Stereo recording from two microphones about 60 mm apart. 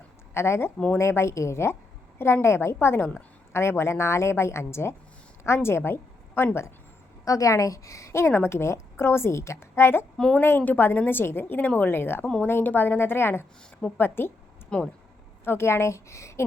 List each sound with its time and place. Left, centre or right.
0.3 s a woman's voice: left
2.7 s a woman's voice: left
7.3 s a woman's voice: left
8.2 s a woman's voice: left
10.2 s speech: centre
10.8 s a woman's voice: left
11.9 s a woman's voice: left
14.7 s speech: centre
15.4 s a woman's voice: left